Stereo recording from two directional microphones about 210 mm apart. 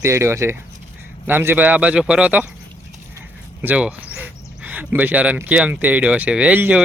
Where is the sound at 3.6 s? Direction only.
5° right (ahead or behind).